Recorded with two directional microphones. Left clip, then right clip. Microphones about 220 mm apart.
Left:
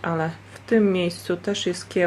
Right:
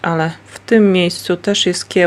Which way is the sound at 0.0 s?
50° right (ahead or behind).